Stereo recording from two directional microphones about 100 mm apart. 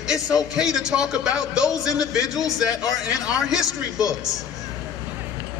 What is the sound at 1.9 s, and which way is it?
Speech, 35° left (ahead or behind).